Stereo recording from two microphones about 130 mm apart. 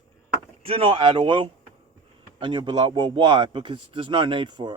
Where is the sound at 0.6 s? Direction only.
45° right (ahead or behind).